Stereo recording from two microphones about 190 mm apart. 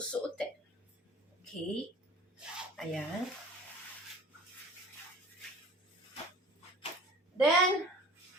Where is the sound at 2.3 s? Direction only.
Centre (ahead or behind).